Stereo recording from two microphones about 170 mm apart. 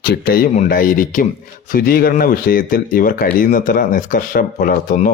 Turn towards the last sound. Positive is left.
turn(degrees=55)  # may be behind; listen again after turning